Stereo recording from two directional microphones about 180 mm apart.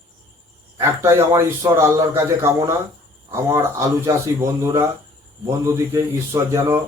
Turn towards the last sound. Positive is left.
turn(degrees=-15)  # may be behind; listen again after turning